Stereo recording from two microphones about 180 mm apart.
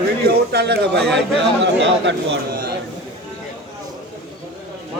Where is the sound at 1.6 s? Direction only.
90° right.